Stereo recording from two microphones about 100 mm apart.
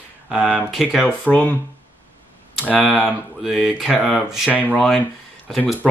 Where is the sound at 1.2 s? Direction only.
15° left (ahead or behind).